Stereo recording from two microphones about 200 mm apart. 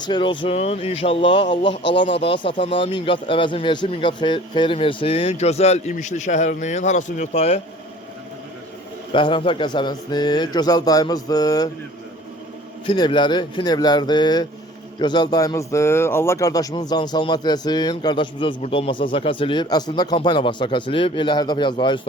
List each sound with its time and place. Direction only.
0.0 s speech: 25° left (ahead or behind)
9.1 s speech: 25° left (ahead or behind)
12.8 s speech: 25° left (ahead or behind)